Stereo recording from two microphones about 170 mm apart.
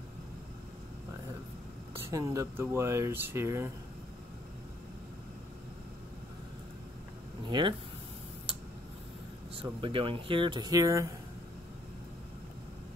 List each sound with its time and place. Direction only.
2.0 s speech: 15° right (ahead or behind)
7.4 s speech: 30° right (ahead or behind)
9.6 s speech: 30° right (ahead or behind)